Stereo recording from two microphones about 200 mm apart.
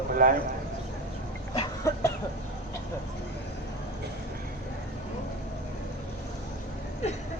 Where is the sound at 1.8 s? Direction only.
15° left (ahead or behind).